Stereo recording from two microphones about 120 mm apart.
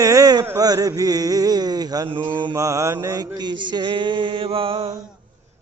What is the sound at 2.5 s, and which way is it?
Mantra, 25° right (ahead or behind).